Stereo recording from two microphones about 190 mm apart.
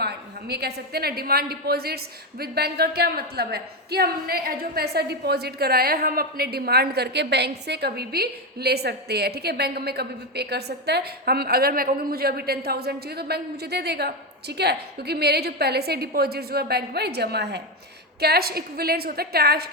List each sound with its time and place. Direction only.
0.0 s a woman's voice: 60° right (ahead or behind)